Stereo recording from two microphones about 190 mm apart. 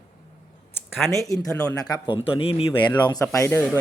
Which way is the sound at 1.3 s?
15° left (ahead or behind).